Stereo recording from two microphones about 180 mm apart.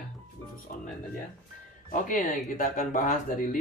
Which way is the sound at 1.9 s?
50° left (ahead or behind).